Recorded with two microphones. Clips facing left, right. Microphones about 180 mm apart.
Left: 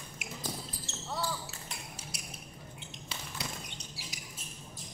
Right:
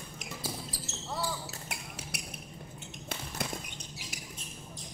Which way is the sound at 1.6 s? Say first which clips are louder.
Right 3 dB; 65° right (ahead or behind).